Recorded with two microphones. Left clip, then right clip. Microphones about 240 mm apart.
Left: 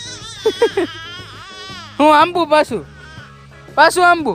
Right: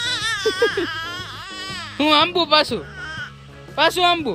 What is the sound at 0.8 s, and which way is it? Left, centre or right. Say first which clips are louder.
Music: right 1 dB; centre.